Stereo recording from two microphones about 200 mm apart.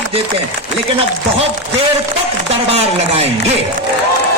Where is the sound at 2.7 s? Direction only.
30° right (ahead or behind).